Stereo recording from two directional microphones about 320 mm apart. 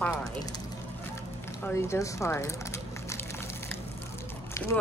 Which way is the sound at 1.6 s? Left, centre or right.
Centre.